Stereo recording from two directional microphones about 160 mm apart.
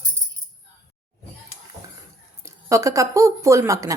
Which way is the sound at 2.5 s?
20° right (ahead or behind).